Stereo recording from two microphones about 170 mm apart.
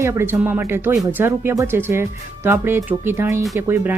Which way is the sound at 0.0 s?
15° right (ahead or behind).